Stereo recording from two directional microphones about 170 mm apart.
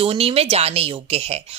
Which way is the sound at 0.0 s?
35° right (ahead or behind).